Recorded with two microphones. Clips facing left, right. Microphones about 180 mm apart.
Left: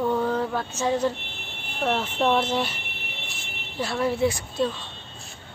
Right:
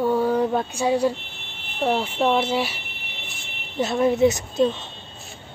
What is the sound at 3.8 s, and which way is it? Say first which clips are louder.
A woman's voice: right 5 dB; 20° right (ahead or behind).